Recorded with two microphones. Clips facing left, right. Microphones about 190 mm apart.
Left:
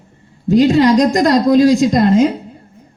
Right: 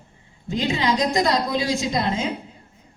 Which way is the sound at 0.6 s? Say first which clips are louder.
Left 8 dB; 45° left (ahead or behind).